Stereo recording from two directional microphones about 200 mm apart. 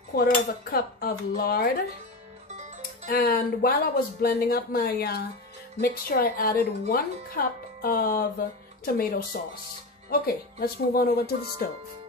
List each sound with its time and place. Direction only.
0.1 s speech: 45° left (ahead or behind)
3.1 s speech: 50° left (ahead or behind)